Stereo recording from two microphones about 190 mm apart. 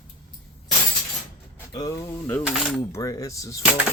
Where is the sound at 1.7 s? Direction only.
20° left (ahead or behind).